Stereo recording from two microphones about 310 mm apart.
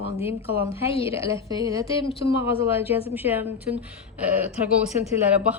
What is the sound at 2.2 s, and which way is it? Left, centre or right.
A woman's voice, centre.